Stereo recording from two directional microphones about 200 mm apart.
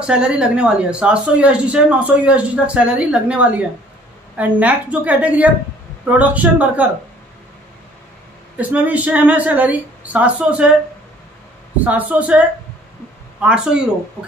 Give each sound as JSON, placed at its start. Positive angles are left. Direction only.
{"t": 0.0, "sound": "speech", "side_deg": -5}
{"t": 8.5, "sound": "speech", "side_deg": -5}
{"t": 11.8, "sound": "speech", "side_deg": -10}